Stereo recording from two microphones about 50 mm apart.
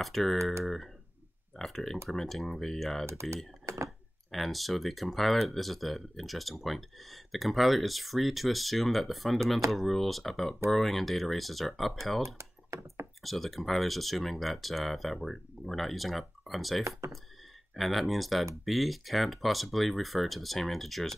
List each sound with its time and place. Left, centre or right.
0.0 s speech: centre
1.6 s speech: centre
3.1 s speech: right
3.6 s a sound: right
4.3 s speech: centre
12.4 s computer keyboard: right
13.2 s speech: centre
17.0 s speech: right
17.7 s speech: centre